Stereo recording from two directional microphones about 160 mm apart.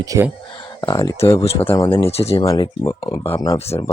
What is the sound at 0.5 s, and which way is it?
Speech, 25° left (ahead or behind).